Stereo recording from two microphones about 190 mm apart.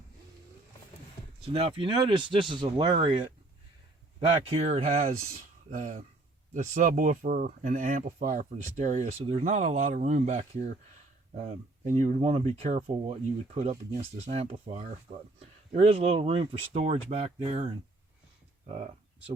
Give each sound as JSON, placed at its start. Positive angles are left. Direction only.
{"t": 1.5, "sound": "speech", "side_deg": -30}
{"t": 4.4, "sound": "speech", "side_deg": -35}